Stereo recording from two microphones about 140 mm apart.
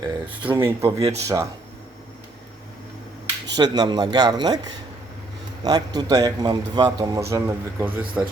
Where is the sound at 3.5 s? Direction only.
30° right (ahead or behind).